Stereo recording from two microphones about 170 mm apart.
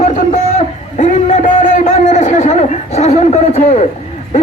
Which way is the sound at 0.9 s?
45° left (ahead or behind).